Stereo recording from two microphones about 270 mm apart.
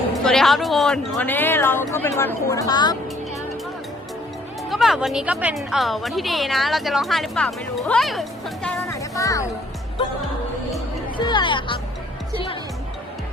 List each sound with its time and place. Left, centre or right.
0.3 s a woman's voice: centre
4.7 s a woman's voice: centre
8.9 s music: centre
11.2 s a woman's voice: centre